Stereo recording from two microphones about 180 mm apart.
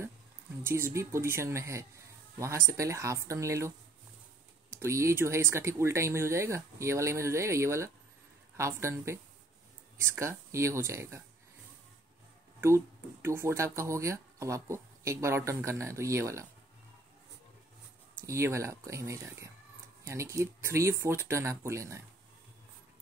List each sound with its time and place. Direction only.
0.7 s speech: 15° right (ahead or behind)
12.5 s speech: 15° right (ahead or behind)
18.2 s speech: 15° right (ahead or behind)